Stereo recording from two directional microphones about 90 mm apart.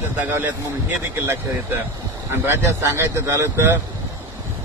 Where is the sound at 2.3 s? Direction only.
25° right (ahead or behind).